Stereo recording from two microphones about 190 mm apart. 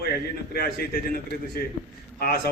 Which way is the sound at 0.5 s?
55° left (ahead or behind).